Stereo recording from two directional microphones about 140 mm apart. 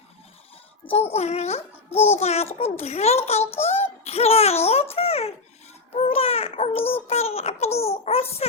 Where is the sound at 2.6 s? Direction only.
50° left (ahead or behind).